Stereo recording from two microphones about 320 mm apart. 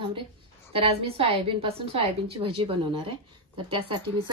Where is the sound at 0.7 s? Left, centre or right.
Centre.